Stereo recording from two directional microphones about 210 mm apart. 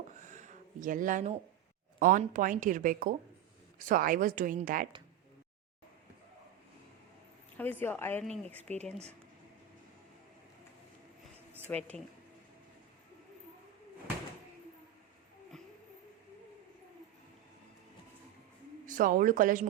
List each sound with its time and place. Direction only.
0.2 s a sound: 35° right (ahead or behind)
2.0 s speech: 40° right (ahead or behind)
7.5 s a woman's voice: 10° left (ahead or behind)
11.8 s speech: 5° left (ahead or behind)
18.9 s speech: 40° right (ahead or behind)